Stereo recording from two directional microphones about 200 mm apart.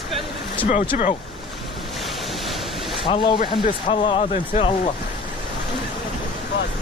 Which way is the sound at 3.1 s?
25° left (ahead or behind).